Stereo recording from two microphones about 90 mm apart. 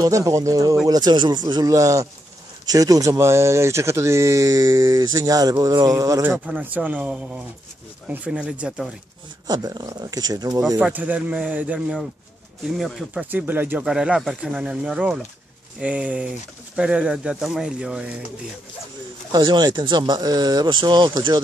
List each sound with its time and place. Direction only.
0.0 s speech: 35° right (ahead or behind)
0.8 s speech: 50° right (ahead or behind)
6.4 s speech: 20° right (ahead or behind)
9.5 s speech: 45° right (ahead or behind)
10.8 s speech: 15° right (ahead or behind)
12.7 s speech: 5° right (ahead or behind)
13.2 s speech: 20° right (ahead or behind)
13.8 s speech: 10° right (ahead or behind)
19.3 s speech: 55° right (ahead or behind)